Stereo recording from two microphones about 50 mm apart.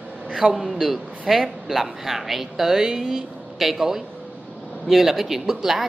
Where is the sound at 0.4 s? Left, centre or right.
Centre.